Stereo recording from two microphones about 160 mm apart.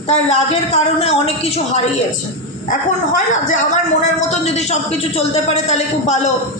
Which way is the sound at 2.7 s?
50° left (ahead or behind).